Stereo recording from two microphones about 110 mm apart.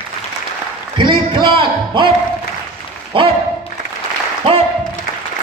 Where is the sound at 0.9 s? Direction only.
50° right (ahead or behind).